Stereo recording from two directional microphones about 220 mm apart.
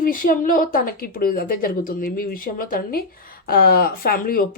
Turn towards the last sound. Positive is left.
turn(degrees=40)  # may be behind; listen again after turning